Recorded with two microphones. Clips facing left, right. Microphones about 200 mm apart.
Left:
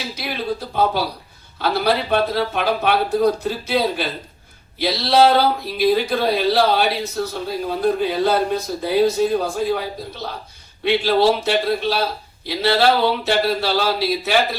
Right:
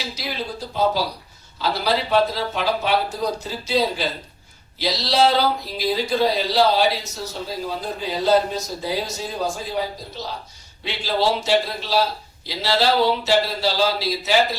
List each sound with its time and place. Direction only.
0.2 s speech: 60° left (ahead or behind)